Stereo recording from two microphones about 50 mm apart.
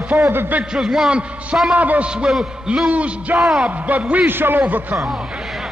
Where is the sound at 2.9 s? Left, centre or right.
Right.